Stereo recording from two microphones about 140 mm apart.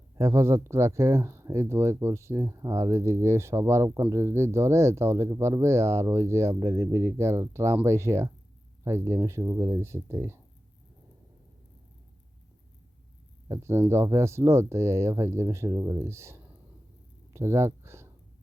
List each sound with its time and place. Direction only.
0.2 s speech: 20° right (ahead or behind)
13.5 s speech: 20° right (ahead or behind)
17.3 s a sound: 20° right (ahead or behind)